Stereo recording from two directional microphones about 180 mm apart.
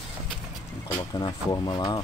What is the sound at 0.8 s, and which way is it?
Speech, 20° left (ahead or behind).